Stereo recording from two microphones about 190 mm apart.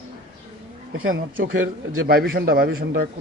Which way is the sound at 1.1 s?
90° right.